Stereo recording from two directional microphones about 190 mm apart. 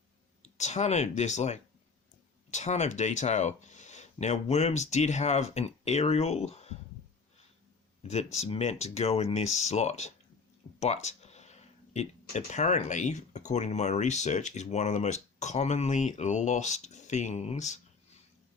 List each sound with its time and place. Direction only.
0.4 s speech: 35° left (ahead or behind)
8.0 s speech: 35° left (ahead or behind)